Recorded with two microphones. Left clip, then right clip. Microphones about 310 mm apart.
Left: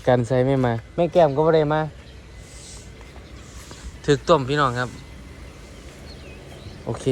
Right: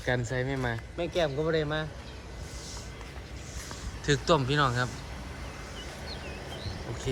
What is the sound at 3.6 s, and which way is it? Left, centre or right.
Speech, centre.